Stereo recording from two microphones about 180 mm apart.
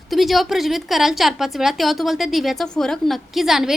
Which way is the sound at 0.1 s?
Centre (ahead or behind).